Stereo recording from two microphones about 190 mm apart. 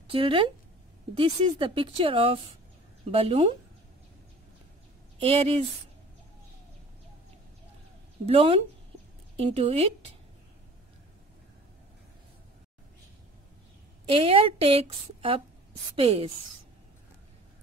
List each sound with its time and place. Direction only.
0.1 s a woman's voice: 25° right (ahead or behind)
5.2 s speech: 30° right (ahead or behind)
8.3 s a woman's voice: 30° right (ahead or behind)
14.0 s a woman's voice: 30° right (ahead or behind)